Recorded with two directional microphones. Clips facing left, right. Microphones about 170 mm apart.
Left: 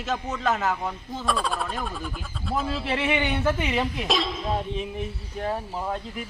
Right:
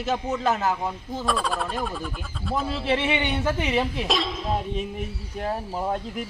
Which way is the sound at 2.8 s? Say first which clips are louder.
Right 3 dB; 25° right (ahead or behind).